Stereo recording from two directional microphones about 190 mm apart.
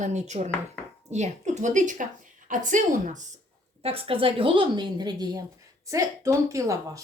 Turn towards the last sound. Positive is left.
turn(degrees=-15)  # may be behind; listen again after turning